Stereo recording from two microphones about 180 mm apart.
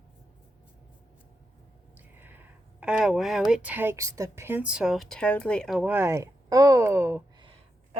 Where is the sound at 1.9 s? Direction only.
10° right (ahead or behind).